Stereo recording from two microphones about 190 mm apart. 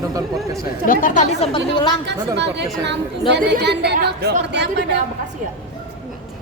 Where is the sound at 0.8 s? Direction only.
45° left (ahead or behind).